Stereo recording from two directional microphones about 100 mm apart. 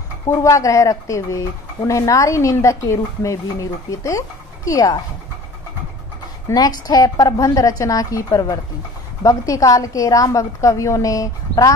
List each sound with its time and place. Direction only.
0.3 s speech: 30° left (ahead or behind)
6.5 s speech: 40° left (ahead or behind)